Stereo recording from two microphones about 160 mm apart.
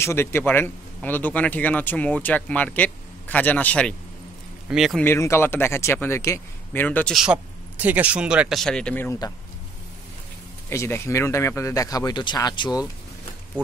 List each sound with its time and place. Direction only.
0.0 s speech: 15° left (ahead or behind)
4.6 s speech: centre (ahead or behind)
5.0 s speech: 15° left (ahead or behind)
7.8 s speech: 10° right (ahead or behind); by 9.2 s 10° left (ahead or behind)
10.7 s speech: 15° left (ahead or behind)